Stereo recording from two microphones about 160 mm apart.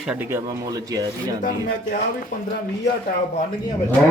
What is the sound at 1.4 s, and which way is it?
Speech, 55° left (ahead or behind).